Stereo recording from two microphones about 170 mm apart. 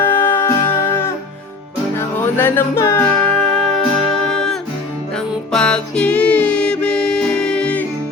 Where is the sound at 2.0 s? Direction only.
15° left (ahead or behind).